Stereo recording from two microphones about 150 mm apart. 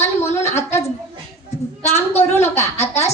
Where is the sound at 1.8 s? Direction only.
45° left (ahead or behind).